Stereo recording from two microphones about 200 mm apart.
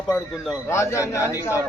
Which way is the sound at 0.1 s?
Centre (ahead or behind).